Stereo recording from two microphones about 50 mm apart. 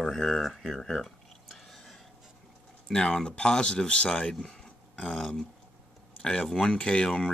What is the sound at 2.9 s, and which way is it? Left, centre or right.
Speech, centre.